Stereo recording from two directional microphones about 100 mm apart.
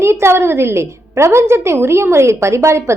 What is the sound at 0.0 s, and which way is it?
A woman's voice, 25° right (ahead or behind).